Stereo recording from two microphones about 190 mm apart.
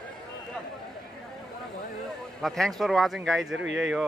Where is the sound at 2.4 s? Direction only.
Centre (ahead or behind).